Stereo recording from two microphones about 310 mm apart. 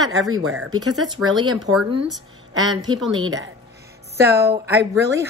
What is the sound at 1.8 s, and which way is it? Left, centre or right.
Speech, right.